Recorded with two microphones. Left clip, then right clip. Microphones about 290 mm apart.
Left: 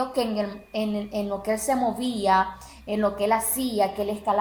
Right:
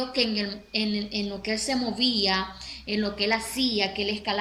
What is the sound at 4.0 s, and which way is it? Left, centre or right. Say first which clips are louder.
Speech: left 3 dB; centre.